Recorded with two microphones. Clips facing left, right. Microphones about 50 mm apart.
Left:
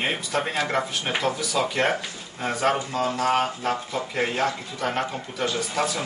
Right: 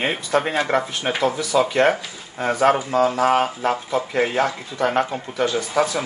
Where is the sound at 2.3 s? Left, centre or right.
Right.